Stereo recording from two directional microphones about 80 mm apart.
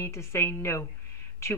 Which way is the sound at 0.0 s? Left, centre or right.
Left.